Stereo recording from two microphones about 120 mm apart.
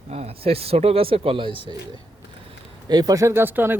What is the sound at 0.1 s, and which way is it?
Speech, 55° right (ahead or behind).